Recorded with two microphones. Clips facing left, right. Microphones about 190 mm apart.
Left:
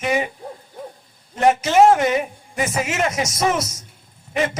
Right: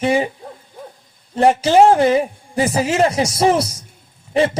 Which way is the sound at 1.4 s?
30° right (ahead or behind).